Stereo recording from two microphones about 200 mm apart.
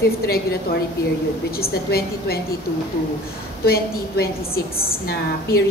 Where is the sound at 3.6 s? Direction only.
50° left (ahead or behind).